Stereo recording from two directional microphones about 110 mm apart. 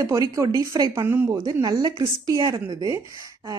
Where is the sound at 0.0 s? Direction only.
30° right (ahead or behind).